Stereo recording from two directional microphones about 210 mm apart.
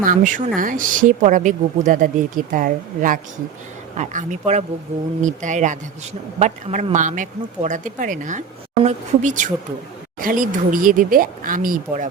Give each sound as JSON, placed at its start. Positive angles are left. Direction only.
{"t": 0.0, "sound": "speech", "side_deg": -40}